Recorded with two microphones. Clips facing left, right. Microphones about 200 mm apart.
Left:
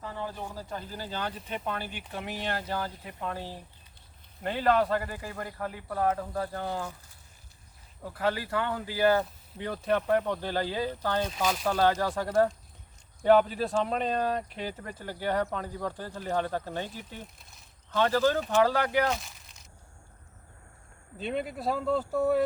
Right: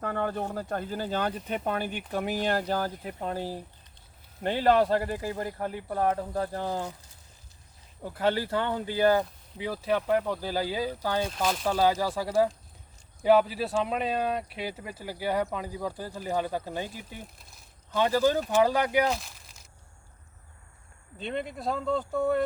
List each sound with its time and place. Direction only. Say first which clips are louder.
0.0 s speech: right 7 dB; 60° right (ahead or behind); by 3.4 s 35° right (ahead or behind)
4.4 s speech: right 3 dB; 30° right (ahead or behind)
8.0 s speech: right 3 dB; 30° right (ahead or behind)
9.6 s speech: even; 5° right (ahead or behind)
11.3 s speech: right 1 dB; centre (ahead or behind)
19.0 s speech: right 1 dB; centre (ahead or behind)
21.2 s speech: left 1 dB; 5° left (ahead or behind)